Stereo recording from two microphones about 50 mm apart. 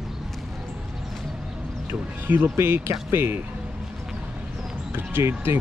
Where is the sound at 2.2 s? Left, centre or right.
Right.